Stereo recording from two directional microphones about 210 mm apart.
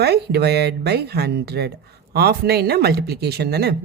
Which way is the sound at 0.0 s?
50° right (ahead or behind).